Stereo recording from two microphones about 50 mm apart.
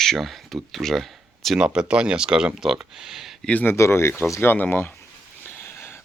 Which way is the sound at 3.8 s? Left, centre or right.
Left.